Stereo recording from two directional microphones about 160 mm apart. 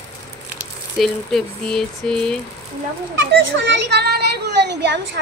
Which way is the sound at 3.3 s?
90° right.